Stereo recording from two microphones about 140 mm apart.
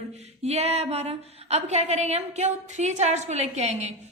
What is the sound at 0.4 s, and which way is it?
A woman's voice, 50° right (ahead or behind).